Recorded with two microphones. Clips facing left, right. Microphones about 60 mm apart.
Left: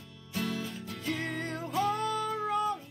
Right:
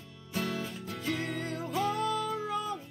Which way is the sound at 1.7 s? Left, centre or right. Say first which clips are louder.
Left 1 dB; centre.